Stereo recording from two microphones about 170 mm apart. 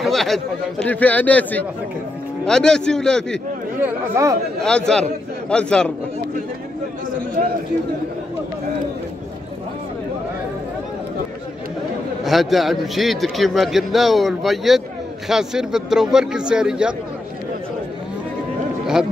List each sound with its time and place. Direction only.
0.0 s a man's voice: centre (ahead or behind)
3.8 s speech: 15° right (ahead or behind)
4.6 s a man's voice: 5° left (ahead or behind)
12.3 s a man's voice: centre (ahead or behind)